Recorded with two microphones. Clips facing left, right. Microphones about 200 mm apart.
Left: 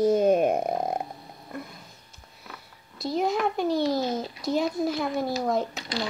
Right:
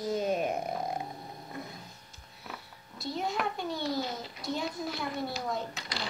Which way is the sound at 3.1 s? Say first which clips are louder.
Left 8 dB; 80° left.